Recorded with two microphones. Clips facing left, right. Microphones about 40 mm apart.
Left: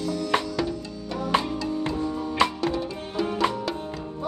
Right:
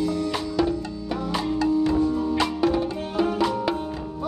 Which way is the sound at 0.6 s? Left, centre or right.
Centre.